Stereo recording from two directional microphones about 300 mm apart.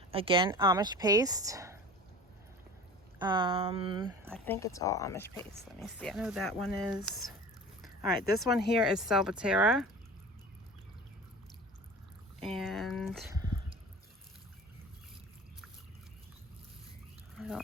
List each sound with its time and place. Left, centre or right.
0.1 s speech: centre
3.2 s speech: centre
4.3 s speech: centre
12.4 s speech: centre
13.3 s a sound: centre
17.3 s pig: centre